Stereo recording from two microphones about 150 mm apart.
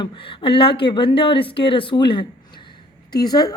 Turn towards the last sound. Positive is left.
turn(degrees=25)  # may be behind; listen again after turning